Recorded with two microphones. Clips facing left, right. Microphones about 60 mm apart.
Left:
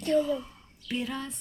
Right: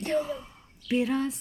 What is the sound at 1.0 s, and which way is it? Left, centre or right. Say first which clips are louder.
Speech: right 7 dB; right.